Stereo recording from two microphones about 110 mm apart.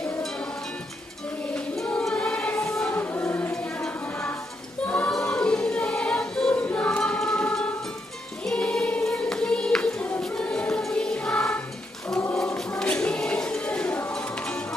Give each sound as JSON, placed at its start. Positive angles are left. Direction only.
{"t": 1.5, "sound": "choir", "side_deg": 10}
{"t": 3.0, "sound": "choir", "side_deg": 20}
{"t": 4.8, "sound": "choir", "side_deg": 15}
{"t": 8.5, "sound": "music", "side_deg": 5}
{"t": 12.3, "sound": "a sound", "side_deg": 5}